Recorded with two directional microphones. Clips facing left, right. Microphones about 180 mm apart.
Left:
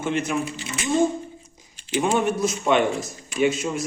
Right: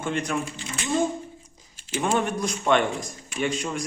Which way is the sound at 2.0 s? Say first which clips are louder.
Left 3 dB; 10° left (ahead or behind).